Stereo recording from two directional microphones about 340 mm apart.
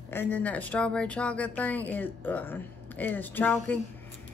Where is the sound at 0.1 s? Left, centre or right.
Centre.